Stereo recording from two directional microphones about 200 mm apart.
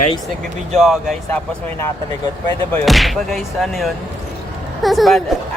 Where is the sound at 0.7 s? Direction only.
Centre (ahead or behind).